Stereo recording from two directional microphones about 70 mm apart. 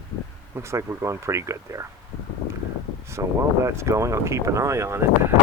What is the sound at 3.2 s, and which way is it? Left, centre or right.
Speech, right.